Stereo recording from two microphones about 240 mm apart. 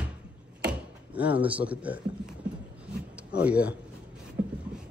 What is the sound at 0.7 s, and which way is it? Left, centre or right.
Speech, centre.